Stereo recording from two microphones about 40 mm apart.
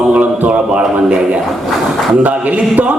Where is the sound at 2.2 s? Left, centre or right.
Right.